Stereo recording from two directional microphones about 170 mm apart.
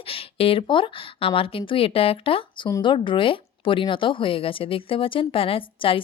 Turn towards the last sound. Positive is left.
turn(degrees=30)  # may be behind; listen again after turning